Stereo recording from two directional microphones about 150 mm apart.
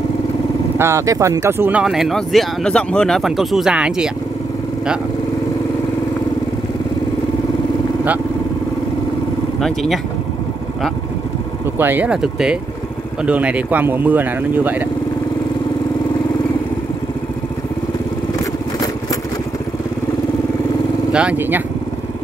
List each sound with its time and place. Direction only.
0.7 s speech: 20° right (ahead or behind)
11.8 s speech: 10° right (ahead or behind)
21.1 s speech: 10° right (ahead or behind)